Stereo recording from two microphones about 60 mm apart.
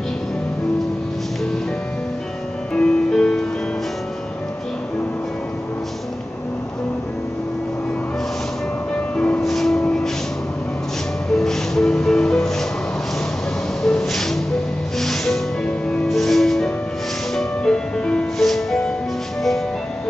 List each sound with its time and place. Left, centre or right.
2.7 s music: centre
8.9 s music: left
9.4 s music: centre
11.3 s music: centre
13.8 s music: centre
15.6 s music: centre
16.1 s music: centre
18.4 s music: centre